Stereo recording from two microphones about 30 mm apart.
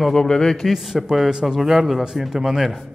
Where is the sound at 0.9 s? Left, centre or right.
Centre.